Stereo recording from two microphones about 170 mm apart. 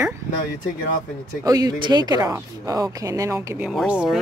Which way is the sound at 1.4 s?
20° right (ahead or behind).